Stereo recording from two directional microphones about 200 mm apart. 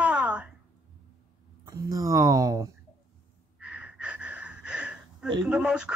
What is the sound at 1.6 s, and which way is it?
Speech, 15° right (ahead or behind).